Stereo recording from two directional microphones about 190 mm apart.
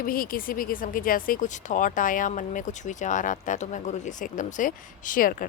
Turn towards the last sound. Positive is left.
turn(degrees=45)  # may be behind; listen again after turning